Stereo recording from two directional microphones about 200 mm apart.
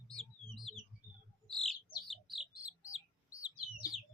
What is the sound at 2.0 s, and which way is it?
Bird, centre (ahead or behind).